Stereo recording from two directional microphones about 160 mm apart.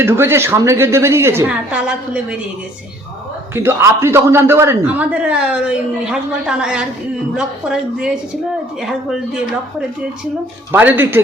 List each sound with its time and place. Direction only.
0.0 s a man's voice: 15° right (ahead or behind)
3.5 s a man's voice: 15° right (ahead or behind)
10.7 s a man's voice: 10° right (ahead or behind)